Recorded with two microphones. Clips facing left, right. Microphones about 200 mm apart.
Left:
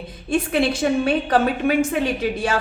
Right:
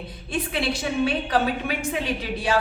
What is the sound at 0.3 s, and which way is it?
Speech, 50° left (ahead or behind).